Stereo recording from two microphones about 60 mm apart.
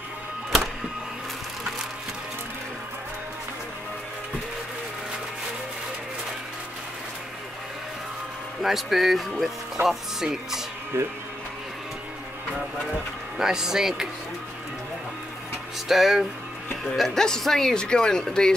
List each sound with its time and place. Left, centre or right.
8.6 s speech: centre
10.9 s speech: right
13.4 s speech: centre
15.9 s speech: centre